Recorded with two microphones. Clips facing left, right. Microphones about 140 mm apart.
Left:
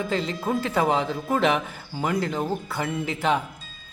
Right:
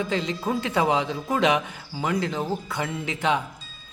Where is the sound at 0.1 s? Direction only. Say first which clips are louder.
Even; centre (ahead or behind).